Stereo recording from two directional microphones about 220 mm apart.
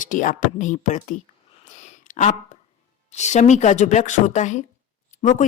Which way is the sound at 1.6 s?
30° left (ahead or behind).